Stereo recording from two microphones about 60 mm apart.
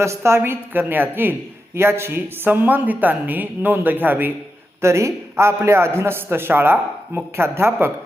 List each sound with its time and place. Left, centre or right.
0.0 s a man's voice: right
4.8 s a man's voice: right